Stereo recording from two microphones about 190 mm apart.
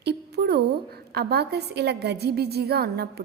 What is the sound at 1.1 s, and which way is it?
A woman's voice, 55° right (ahead or behind).